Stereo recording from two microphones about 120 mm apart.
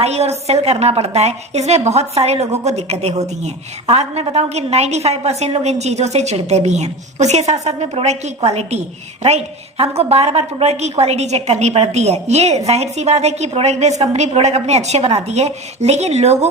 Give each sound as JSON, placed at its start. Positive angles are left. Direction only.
{"t": 0.0, "sound": "a woman's voice", "side_deg": -60}